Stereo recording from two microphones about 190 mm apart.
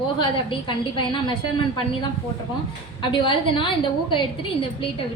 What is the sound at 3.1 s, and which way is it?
A woman's voice, 25° left (ahead or behind).